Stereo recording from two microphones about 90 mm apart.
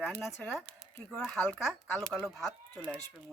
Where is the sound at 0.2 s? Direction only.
5° left (ahead or behind).